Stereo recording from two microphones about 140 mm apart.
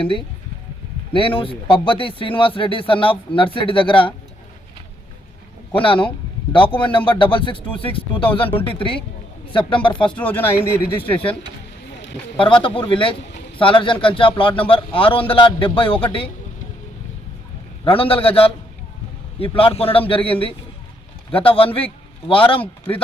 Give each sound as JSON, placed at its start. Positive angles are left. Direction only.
{"t": 0.0, "sound": "a man's voice", "side_deg": 35}
{"t": 5.7, "sound": "a man's voice", "side_deg": 40}
{"t": 10.1, "sound": "speech", "side_deg": 10}
{"t": 12.4, "sound": "a man's voice", "side_deg": 35}
{"t": 17.8, "sound": "a man's voice", "side_deg": 40}